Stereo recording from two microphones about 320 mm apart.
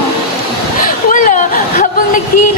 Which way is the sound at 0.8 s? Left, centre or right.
Left.